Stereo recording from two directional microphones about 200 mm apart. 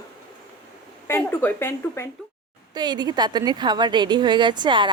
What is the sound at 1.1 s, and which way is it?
Speech, 10° left (ahead or behind).